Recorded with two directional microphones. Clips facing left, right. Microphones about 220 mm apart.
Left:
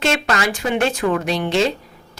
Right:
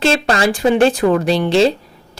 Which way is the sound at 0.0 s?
30° right (ahead or behind).